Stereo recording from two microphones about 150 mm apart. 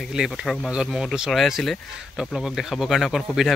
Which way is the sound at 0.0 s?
Centre (ahead or behind).